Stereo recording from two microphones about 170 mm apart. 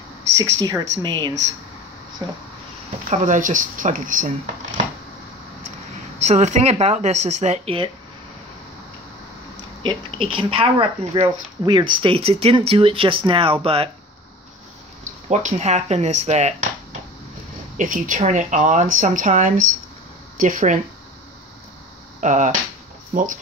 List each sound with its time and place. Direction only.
0.4 s speech: 20° right (ahead or behind)
3.1 s speech: 50° right (ahead or behind)
6.1 s speech: 40° right (ahead or behind)
9.8 s speech: 30° right (ahead or behind)
15.2 s speech: 40° right (ahead or behind)
17.7 s speech: 50° right (ahead or behind)
22.2 s speech: 45° right (ahead or behind)